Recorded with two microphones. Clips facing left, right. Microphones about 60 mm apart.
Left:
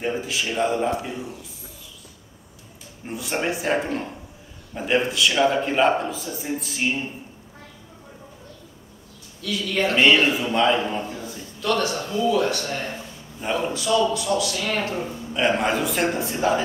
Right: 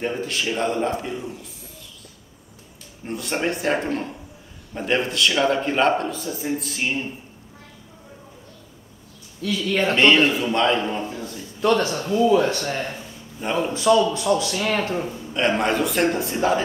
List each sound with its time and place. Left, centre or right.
0.0 s speech: centre
3.1 s speech: centre
9.4 s a man's voice: right
9.9 s speech: centre
11.6 s a man's voice: right
13.4 s speech: centre
13.7 s a man's voice: right
15.3 s speech: centre